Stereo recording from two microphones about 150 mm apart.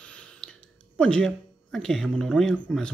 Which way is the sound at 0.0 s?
5° left (ahead or behind).